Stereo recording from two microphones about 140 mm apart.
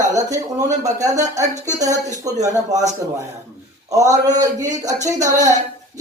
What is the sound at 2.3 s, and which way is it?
Speech, 25° right (ahead or behind).